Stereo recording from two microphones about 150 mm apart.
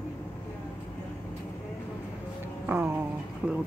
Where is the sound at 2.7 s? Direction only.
15° right (ahead or behind).